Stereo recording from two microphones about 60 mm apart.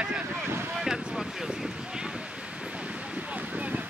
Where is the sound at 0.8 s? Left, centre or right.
Centre.